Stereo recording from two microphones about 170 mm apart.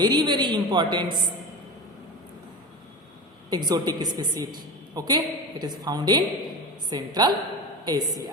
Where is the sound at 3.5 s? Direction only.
25° right (ahead or behind).